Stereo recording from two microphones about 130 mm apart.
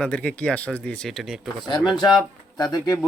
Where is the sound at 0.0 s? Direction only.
10° left (ahead or behind).